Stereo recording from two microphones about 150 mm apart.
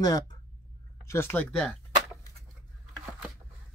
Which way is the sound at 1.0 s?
15° left (ahead or behind).